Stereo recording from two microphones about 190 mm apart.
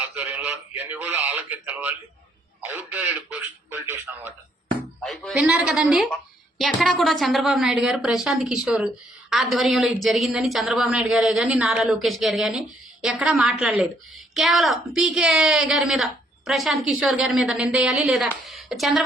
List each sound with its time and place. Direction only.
0.0 s a man's voice: 10° right (ahead or behind)
5.0 s a woman's voice: centre (ahead or behind)